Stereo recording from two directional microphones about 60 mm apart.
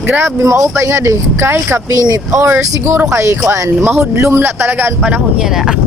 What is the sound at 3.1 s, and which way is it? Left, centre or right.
Speech, right.